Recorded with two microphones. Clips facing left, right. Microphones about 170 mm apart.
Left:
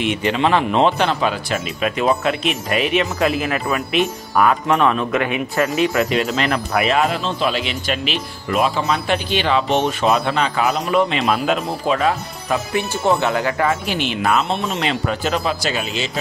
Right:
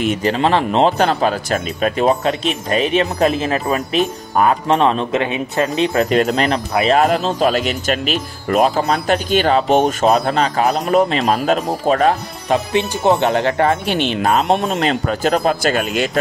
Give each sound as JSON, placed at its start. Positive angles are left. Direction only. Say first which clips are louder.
{"t": 0.0, "sound": "speech", "louder": "right 2 dB", "side_deg": -40}
{"t": 3.6, "sound": "speech", "louder": "right 2 dB", "side_deg": -40}
{"t": 4.4, "sound": "speech", "louder": "right 2 dB", "side_deg": -30}
{"t": 6.1, "sound": "speech", "louder": "right 4 dB", "side_deg": -45}
{"t": 6.5, "sound": "speech", "louder": "right 3 dB", "side_deg": -25}
{"t": 7.0, "sound": "speech", "louder": "right 4 dB", "side_deg": -40}
{"t": 12.4, "sound": "speech", "louder": "right 4 dB", "side_deg": -20}
{"t": 13.5, "sound": "speech", "louder": "right 4 dB", "side_deg": -35}
{"t": 14.2, "sound": "speech", "louder": "right 3 dB", "side_deg": -45}